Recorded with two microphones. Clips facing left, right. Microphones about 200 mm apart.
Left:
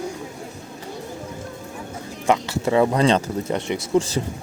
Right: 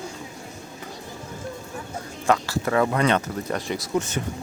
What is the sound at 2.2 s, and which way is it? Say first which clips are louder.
Speech: left 2 dB; 20° left (ahead or behind).